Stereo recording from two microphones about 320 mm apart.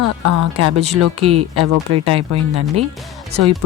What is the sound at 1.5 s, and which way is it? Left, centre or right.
Speech, right.